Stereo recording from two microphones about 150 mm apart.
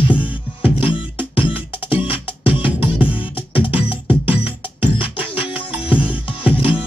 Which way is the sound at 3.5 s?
35° left (ahead or behind).